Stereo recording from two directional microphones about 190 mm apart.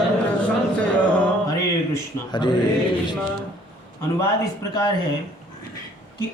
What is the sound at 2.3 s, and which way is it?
Speech, 25° left (ahead or behind).